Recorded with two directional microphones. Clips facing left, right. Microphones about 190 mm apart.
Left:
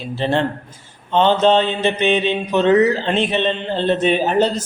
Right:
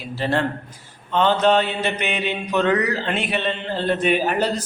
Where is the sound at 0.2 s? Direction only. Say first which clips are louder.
Left 3 dB; 25° left (ahead or behind).